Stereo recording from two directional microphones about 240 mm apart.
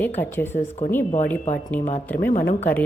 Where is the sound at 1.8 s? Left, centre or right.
Left.